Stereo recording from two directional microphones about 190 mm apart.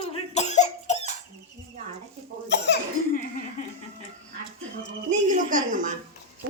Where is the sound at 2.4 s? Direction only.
65° left (ahead or behind).